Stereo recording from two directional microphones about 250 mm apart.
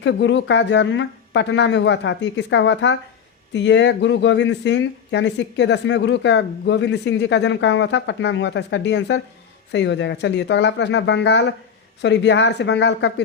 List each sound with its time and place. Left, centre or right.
0.0 s speech: left